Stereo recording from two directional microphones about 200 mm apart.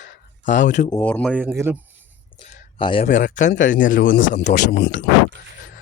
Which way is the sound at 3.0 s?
40° left (ahead or behind).